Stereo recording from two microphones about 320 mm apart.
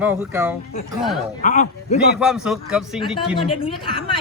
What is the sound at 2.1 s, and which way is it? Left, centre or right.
Speech, centre.